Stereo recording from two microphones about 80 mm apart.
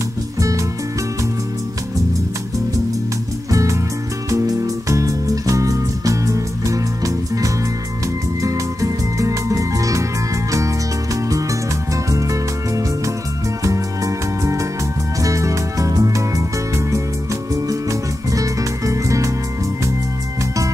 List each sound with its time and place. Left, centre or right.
0.4 s music: right
3.4 s music: right
12.1 s music: right